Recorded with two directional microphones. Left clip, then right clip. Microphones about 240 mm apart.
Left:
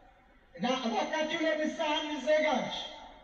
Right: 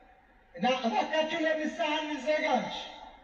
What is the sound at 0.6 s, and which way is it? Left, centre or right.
A man's voice, right.